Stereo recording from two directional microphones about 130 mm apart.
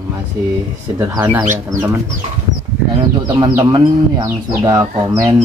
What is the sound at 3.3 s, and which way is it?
Speech, 35° right (ahead or behind).